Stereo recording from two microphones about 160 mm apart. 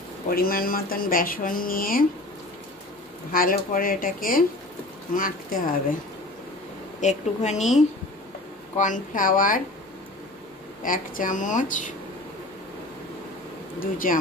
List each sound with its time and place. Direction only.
0.3 s speech: 65° left (ahead or behind)
3.3 s speech: 60° left (ahead or behind)
7.0 s speech: 45° left (ahead or behind)
8.7 s speech: 50° left (ahead or behind)
10.8 s speech: 55° left (ahead or behind)
13.7 s speech: 60° left (ahead or behind)